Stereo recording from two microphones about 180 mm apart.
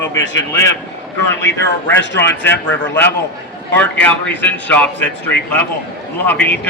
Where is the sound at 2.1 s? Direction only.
80° left.